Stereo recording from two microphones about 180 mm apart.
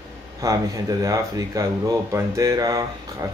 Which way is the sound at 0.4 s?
20° right (ahead or behind).